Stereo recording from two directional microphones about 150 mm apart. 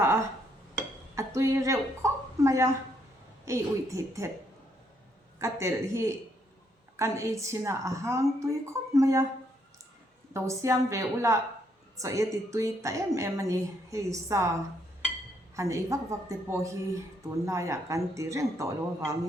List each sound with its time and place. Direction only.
0.0 s dishes: 15° right (ahead or behind)
1.1 s a woman's voice: 20° right (ahead or behind)
5.4 s a woman's voice: 20° right (ahead or behind)
10.3 s a woman's voice: 20° right (ahead or behind)
15.5 s a woman's voice: 20° right (ahead or behind)